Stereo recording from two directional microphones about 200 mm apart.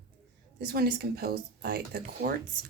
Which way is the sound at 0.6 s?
50° right (ahead or behind).